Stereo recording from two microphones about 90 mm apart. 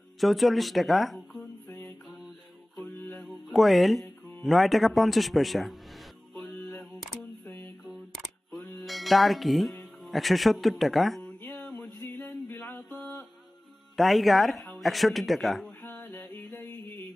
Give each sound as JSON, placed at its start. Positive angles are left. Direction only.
{"t": 0.2, "sound": "speech", "side_deg": 0}
{"t": 1.7, "sound": "mantra", "side_deg": 20}
{"t": 2.0, "sound": "music", "side_deg": 0}
{"t": 4.4, "sound": "speech", "side_deg": 0}
{"t": 6.5, "sound": "a sound", "side_deg": 10}
{"t": 7.8, "sound": "camera", "side_deg": 0}
{"t": 8.8, "sound": "music", "side_deg": 0}
{"t": 12.0, "sound": "music", "side_deg": 20}
{"t": 13.9, "sound": "speech", "side_deg": 0}
{"t": 15.8, "sound": "music", "side_deg": 20}